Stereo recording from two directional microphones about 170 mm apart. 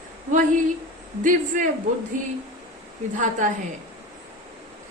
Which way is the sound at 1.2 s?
50° right (ahead or behind).